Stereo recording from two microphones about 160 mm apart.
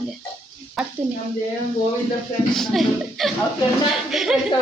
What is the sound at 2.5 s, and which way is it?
A woman's voice, centre (ahead or behind).